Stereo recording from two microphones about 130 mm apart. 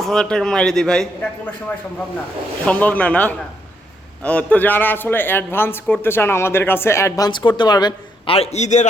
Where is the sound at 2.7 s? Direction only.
10° left (ahead or behind); by 8.3 s 30° left (ahead or behind).